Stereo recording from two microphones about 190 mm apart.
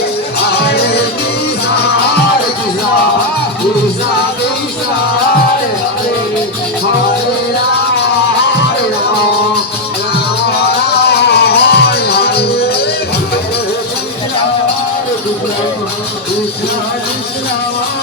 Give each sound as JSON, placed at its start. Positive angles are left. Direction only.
{"t": 0.6, "sound": "music", "side_deg": 55}
{"t": 11.0, "sound": "music", "side_deg": 55}